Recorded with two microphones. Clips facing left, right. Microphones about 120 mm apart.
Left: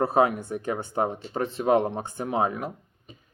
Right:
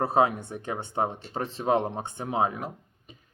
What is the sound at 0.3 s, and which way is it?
Speech, 40° left (ahead or behind).